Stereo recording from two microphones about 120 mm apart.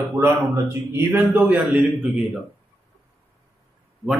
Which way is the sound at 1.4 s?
10° right (ahead or behind).